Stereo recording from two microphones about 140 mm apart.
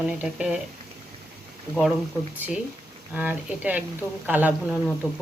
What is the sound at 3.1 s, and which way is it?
Speech, 10° right (ahead or behind).